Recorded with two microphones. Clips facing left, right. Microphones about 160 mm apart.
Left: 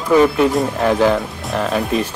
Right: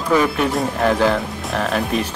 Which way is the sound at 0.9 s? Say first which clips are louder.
Left 3 dB; 15° left (ahead or behind).